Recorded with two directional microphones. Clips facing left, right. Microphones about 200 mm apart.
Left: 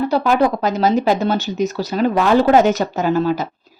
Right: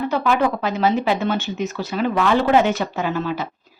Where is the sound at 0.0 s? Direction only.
35° left (ahead or behind).